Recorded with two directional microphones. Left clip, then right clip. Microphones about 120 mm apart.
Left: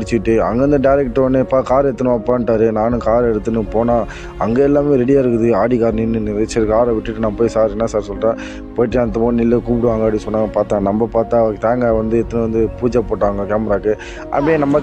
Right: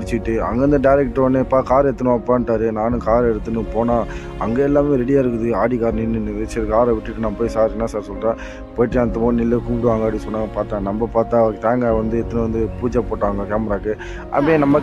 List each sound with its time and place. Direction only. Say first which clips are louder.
0.1 s speech: left 6 dB; 25° left (ahead or behind)
10.5 s speech: left 7 dB; 50° left (ahead or behind)
11.1 s speech: right 1 dB; 25° left (ahead or behind)